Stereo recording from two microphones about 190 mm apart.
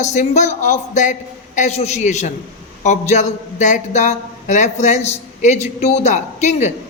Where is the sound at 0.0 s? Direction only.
40° left (ahead or behind).